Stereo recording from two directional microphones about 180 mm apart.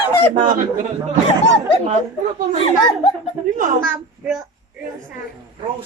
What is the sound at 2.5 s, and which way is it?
Speech, 30° left (ahead or behind).